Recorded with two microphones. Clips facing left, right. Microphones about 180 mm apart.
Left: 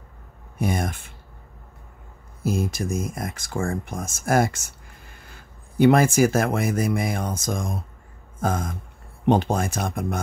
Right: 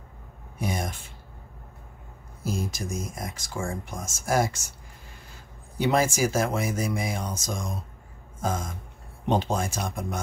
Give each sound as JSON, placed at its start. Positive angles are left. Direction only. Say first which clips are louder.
{"t": 0.6, "sound": "speech", "louder": "left 5 dB", "side_deg": 55}
{"t": 2.4, "sound": "speech", "louder": "left 6 dB", "side_deg": 55}